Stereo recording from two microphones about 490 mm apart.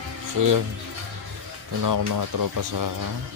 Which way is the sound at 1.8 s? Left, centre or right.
Right.